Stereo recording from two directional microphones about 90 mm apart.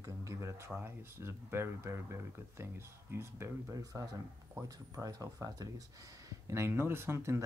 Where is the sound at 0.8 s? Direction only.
25° right (ahead or behind).